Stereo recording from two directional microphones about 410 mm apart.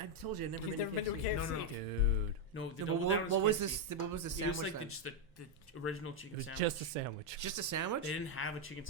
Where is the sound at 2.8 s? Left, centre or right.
Right.